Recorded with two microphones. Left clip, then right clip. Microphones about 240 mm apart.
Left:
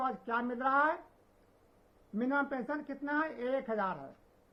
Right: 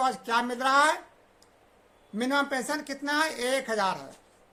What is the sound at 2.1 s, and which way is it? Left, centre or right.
A woman's voice, right.